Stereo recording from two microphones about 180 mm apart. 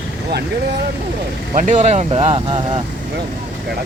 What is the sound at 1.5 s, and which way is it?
Speech, 40° right (ahead or behind).